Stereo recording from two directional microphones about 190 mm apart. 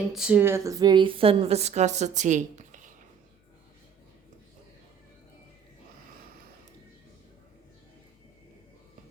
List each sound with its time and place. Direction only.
0.1 s a woman's voice: 5° right (ahead or behind); by 2.9 s 40° right (ahead or behind)